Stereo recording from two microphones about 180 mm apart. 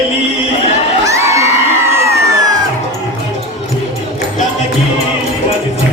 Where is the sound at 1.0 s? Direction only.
15° right (ahead or behind).